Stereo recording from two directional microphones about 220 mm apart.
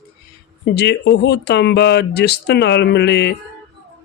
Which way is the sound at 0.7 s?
50° left (ahead or behind).